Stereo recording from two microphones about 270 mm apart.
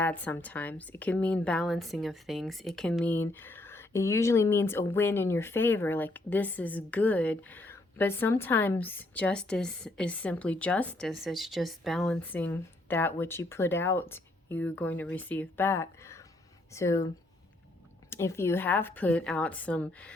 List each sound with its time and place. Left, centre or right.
0.0 s speech: centre
18.1 s speech: centre